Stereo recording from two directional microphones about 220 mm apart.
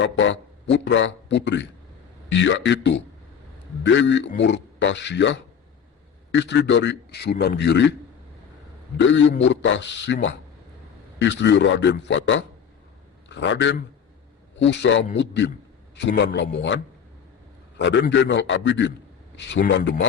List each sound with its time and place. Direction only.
0.0 s a man's voice: 55° left (ahead or behind)
9.0 s a man's voice: 60° left (ahead or behind)
17.7 s a man's voice: 55° left (ahead or behind)